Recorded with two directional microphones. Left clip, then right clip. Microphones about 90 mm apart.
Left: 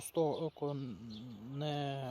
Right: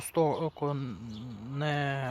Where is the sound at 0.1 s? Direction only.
25° left (ahead or behind).